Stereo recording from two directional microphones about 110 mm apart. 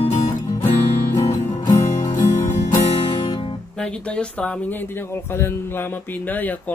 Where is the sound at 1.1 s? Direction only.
40° left (ahead or behind).